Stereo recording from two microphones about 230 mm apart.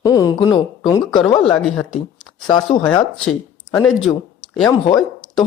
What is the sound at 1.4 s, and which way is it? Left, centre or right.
Speech, centre.